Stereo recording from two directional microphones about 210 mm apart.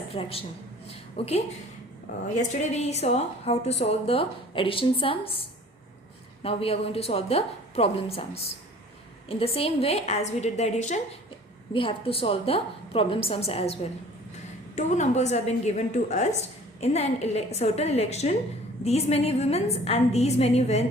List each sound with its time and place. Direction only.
0.1 s a woman's voice: 25° left (ahead or behind)
0.9 s a sound: 30° left (ahead or behind)
2.4 s a woman's voice: 35° left (ahead or behind)
14.8 s a woman's voice: 35° left (ahead or behind)